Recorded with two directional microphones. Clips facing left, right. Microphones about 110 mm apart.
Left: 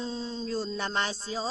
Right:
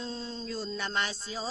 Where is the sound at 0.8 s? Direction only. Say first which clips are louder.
Left 2 dB; 30° left (ahead or behind).